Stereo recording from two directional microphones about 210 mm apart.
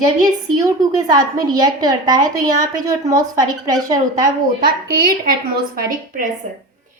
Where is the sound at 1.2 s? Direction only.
20° right (ahead or behind).